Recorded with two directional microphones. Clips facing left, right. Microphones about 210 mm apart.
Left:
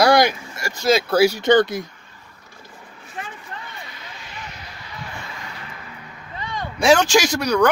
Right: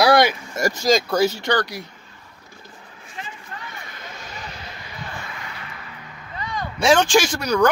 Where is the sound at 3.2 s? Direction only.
55° left (ahead or behind).